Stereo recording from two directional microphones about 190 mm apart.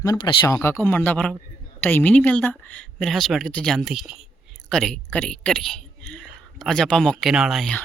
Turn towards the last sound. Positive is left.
turn(degrees=0)  # may be behind; listen again after turning